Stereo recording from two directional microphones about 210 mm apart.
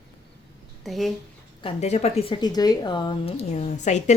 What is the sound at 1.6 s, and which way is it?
A woman's voice, 30° left (ahead or behind).